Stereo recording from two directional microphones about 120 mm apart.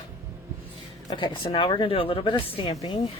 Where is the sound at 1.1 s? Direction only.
45° left (ahead or behind).